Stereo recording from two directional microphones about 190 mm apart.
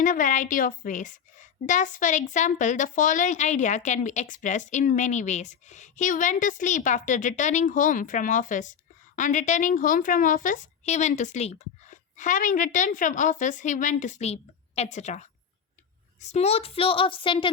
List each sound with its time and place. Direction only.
0.0 s a woman's voice: 45° left (ahead or behind); by 17.5 s 25° left (ahead or behind)